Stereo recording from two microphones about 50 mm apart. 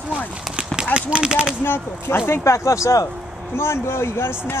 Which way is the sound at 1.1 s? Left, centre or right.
Centre.